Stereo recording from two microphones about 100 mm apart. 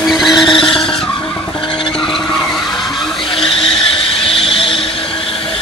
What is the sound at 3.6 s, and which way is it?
Train, 65° left (ahead or behind).